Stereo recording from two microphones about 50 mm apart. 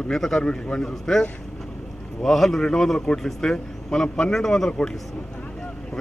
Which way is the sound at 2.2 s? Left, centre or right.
Centre.